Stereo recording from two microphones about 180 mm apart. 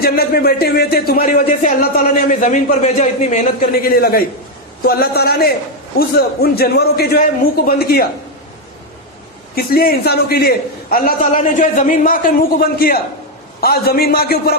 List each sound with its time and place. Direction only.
0.0 s a man's voice: 55° left (ahead or behind)
9.6 s a man's voice: 55° left (ahead or behind)